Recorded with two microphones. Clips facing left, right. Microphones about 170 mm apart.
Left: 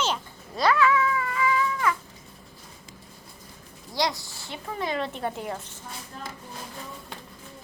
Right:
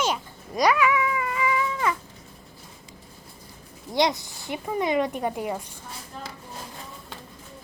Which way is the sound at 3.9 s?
20° right (ahead or behind).